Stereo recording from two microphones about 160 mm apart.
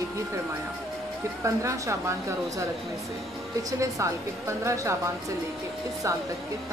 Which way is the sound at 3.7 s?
20° right (ahead or behind).